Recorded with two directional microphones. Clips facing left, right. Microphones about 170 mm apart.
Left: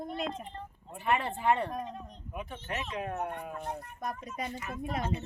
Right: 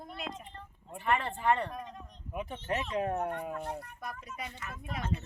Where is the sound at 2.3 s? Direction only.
30° right (ahead or behind).